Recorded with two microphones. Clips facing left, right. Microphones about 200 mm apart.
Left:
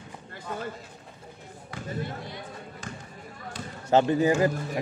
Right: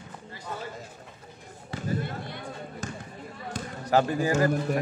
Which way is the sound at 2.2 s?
55° right (ahead or behind).